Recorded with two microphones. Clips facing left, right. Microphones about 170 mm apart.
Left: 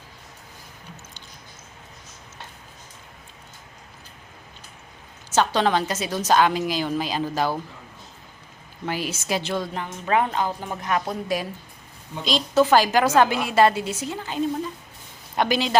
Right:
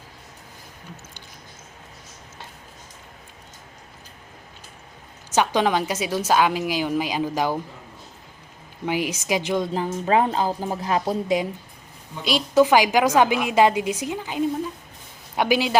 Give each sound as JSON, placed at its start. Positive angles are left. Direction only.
{"t": 5.3, "sound": "a woman's voice", "side_deg": -10}
{"t": 8.9, "sound": "a woman's voice", "side_deg": -15}
{"t": 9.7, "sound": "a woman's voice", "side_deg": -30}
{"t": 12.2, "sound": "a woman's voice", "side_deg": -10}